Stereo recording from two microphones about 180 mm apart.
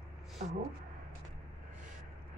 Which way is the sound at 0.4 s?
40° right (ahead or behind).